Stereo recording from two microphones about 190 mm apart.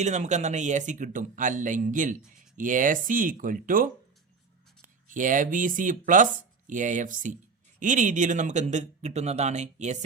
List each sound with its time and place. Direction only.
0.0 s speech: 40° right (ahead or behind)
5.0 s speech: 45° right (ahead or behind)